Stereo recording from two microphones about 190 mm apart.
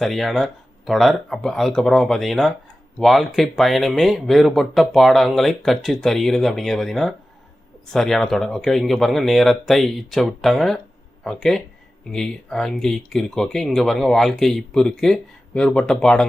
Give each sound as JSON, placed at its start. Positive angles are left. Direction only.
{"t": 0.0, "sound": "speech", "side_deg": 0}